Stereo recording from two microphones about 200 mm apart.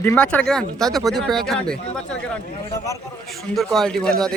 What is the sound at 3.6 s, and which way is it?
Speech, centre (ahead or behind).